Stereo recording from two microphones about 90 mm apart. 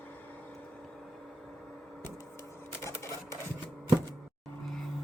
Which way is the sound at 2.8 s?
35° left (ahead or behind).